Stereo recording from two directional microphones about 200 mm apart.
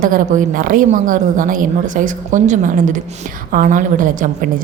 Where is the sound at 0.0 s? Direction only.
40° right (ahead or behind).